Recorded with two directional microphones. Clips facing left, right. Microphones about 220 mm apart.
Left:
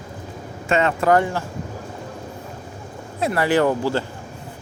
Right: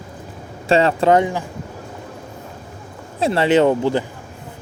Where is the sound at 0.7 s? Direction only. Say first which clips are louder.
Right 3 dB; 30° right (ahead or behind).